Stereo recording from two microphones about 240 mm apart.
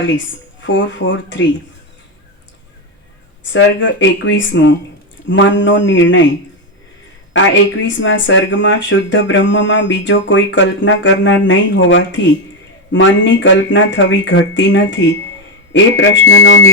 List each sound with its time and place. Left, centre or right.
0.6 s speech: left
3.4 s speech: left
7.3 s speech: left